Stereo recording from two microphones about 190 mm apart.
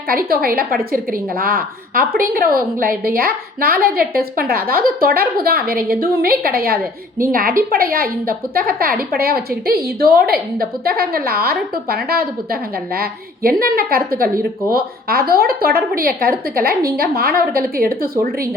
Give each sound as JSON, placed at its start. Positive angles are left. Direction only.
{"t": 0.1, "sound": "a woman's voice", "side_deg": -50}